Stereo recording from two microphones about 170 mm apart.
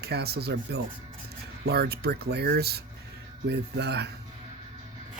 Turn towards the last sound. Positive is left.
turn(degrees=-80)